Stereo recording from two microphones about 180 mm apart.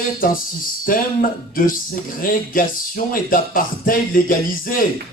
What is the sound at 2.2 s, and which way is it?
Speech, 50° left (ahead or behind).